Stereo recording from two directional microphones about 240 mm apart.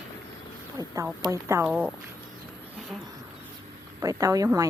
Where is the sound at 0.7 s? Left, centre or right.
Centre.